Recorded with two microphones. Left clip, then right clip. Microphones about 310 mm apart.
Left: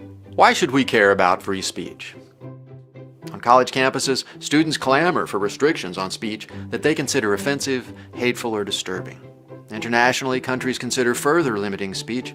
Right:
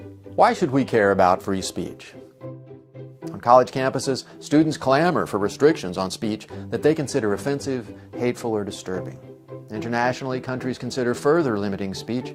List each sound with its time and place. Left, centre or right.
0.3 s speech: right
3.2 s speech: right